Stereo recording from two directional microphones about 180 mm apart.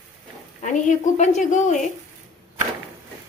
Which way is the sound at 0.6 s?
45° left (ahead or behind).